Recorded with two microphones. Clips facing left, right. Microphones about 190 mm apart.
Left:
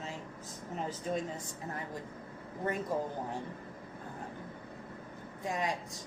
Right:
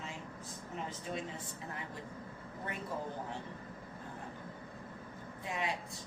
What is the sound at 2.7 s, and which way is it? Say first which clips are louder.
Speech: left 9 dB; 45° left (ahead or behind).